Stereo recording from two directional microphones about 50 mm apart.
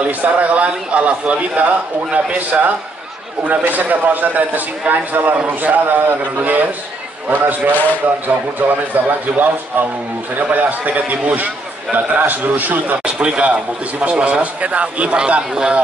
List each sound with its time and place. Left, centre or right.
0.2 s a man's voice: right
2.3 s a man's voice: right
8.9 s a man's voice: right
13.0 s a man's voice: right